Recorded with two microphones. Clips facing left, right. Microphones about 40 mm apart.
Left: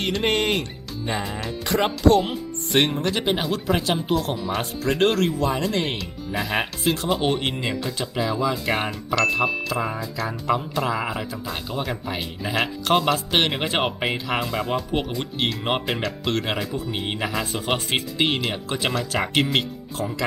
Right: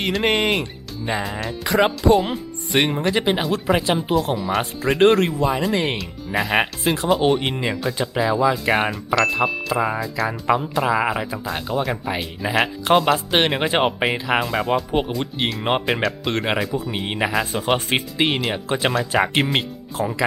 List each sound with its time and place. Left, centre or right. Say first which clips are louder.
0.0 s speech: right 3 dB; centre
4.8 s speech: right 5 dB; centre
5.4 s speech: right 3 dB; centre
7.1 s speech: right 4 dB; centre
9.7 s speech: right 5 dB; centre
10.2 s speech: right 3 dB; centre
16.3 s speech: right 1 dB; centre
16.7 s speech: right 3 dB; centre
19.1 s speech: right 3 dB; centre
20.0 s speech: right 5 dB; right